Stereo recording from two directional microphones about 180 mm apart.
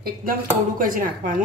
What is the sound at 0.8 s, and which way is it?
Speech, 50° right (ahead or behind).